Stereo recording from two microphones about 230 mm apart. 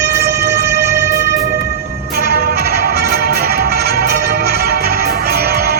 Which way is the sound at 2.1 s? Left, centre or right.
Right.